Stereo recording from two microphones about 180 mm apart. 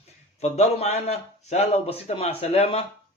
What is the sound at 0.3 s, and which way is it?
Speech, 35° left (ahead or behind).